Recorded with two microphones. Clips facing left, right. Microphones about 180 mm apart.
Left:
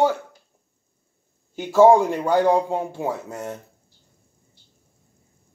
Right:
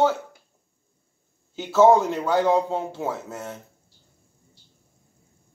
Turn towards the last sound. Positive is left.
turn(degrees=15)  # may be behind; listen again after turning